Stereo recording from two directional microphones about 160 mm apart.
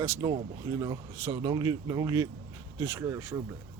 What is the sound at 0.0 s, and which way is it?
Speech, 15° right (ahead or behind).